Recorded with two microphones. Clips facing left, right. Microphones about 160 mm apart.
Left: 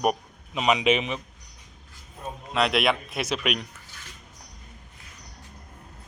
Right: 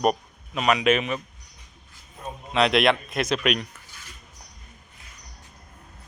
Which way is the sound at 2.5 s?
5° left (ahead or behind).